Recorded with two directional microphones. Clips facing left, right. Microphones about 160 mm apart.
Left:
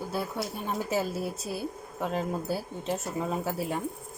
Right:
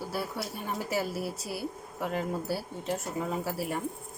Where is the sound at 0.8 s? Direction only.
20° left (ahead or behind).